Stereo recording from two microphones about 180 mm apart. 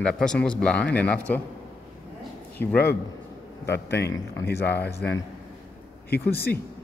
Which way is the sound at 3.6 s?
65° left (ahead or behind).